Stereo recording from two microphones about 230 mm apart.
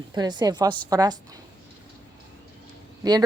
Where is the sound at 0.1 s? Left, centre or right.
Centre.